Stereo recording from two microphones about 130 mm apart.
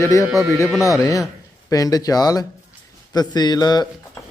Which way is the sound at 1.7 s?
30° left (ahead or behind).